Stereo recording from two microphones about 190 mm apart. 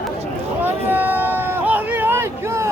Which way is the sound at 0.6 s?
10° right (ahead or behind).